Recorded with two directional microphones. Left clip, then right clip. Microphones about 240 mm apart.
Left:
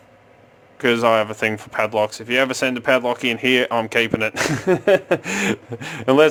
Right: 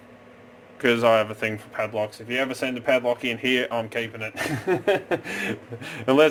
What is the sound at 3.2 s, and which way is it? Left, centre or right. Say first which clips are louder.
Speech: left 6 dB; left.